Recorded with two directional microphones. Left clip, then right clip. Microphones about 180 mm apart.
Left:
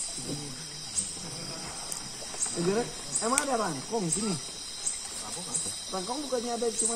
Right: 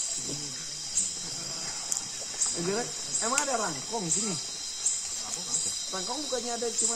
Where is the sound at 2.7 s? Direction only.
15° right (ahead or behind).